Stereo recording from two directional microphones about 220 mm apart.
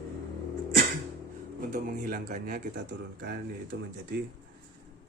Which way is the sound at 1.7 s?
35° right (ahead or behind).